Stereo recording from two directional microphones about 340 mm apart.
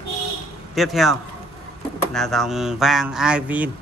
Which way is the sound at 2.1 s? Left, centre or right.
Centre.